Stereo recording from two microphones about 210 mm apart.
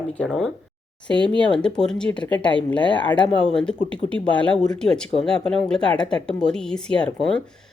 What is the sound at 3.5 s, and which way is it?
Speech, 5° left (ahead or behind).